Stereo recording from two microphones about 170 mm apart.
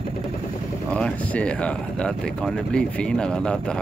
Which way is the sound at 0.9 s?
5° left (ahead or behind).